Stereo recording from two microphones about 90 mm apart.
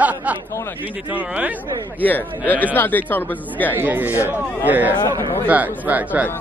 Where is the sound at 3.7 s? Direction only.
20° right (ahead or behind).